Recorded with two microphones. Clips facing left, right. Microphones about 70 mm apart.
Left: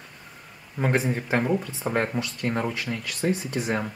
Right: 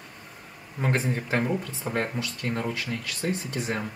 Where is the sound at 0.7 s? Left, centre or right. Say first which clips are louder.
Left 3 dB; centre.